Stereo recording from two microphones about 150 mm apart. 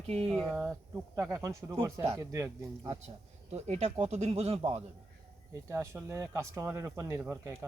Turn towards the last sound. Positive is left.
turn(degrees=-15)  # may be behind; listen again after turning